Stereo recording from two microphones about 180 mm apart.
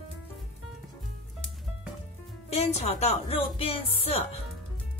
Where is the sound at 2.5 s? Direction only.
35° left (ahead or behind).